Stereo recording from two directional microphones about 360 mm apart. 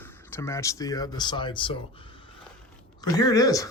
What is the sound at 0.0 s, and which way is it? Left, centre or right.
Speech, centre.